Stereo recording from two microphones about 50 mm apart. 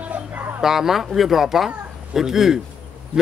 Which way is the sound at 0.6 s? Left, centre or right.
Centre.